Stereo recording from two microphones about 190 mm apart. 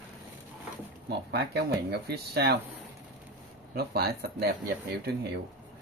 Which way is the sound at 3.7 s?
55° right (ahead or behind).